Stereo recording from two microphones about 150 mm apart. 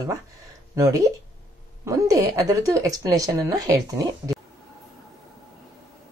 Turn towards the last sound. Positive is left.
turn(degrees=-25)  # may be behind; listen again after turning